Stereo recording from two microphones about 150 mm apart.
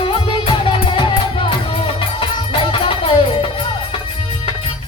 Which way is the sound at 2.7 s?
35° left (ahead or behind).